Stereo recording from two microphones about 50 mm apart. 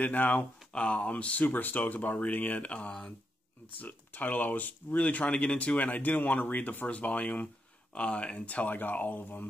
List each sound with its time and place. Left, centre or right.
0.0 s speech: left
1.5 s speech: left